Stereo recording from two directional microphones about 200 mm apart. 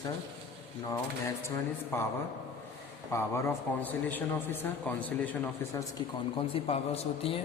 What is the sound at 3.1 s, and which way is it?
A man's voice, 15° left (ahead or behind).